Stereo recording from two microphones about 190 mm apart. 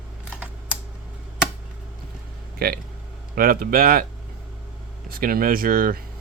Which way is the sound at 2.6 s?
55° right (ahead or behind).